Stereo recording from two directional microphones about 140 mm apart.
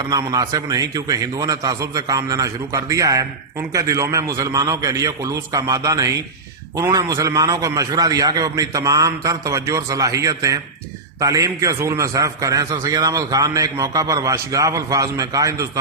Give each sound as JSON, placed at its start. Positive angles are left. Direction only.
{"t": 0.1, "sound": "a man's voice", "side_deg": -25}